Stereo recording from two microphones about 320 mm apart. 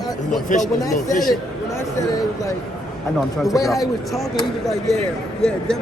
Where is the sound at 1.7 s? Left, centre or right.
Centre.